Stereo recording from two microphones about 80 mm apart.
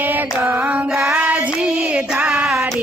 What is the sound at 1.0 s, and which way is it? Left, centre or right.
Child singing, centre.